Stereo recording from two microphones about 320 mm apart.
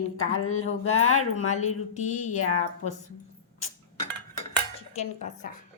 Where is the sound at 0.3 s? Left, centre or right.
Left.